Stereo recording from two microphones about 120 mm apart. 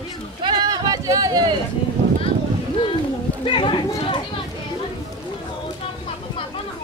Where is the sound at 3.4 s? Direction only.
45° left (ahead or behind).